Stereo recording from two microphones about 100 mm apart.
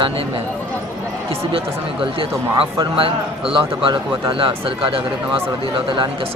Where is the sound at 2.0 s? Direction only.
65° right (ahead or behind).